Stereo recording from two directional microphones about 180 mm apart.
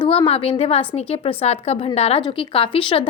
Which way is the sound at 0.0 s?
30° left (ahead or behind).